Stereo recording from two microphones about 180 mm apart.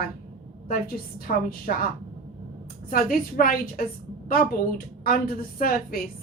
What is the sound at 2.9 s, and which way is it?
A woman's voice, 55° left (ahead or behind).